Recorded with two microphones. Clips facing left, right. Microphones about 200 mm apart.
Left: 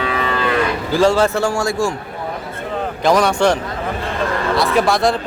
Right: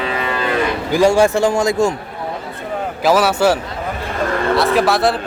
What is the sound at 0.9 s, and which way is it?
A man's voice, 15° right (ahead or behind).